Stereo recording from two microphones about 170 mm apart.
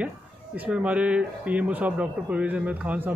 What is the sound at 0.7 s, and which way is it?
Speech, 5° right (ahead or behind).